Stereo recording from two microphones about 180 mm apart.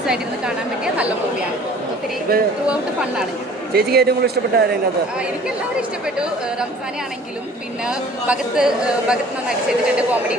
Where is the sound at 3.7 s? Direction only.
60° right (ahead or behind).